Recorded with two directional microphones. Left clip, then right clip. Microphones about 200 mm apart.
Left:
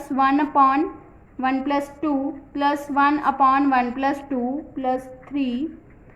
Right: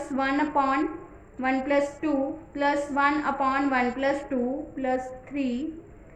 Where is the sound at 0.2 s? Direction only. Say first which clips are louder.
Left 8 dB; 35° left (ahead or behind).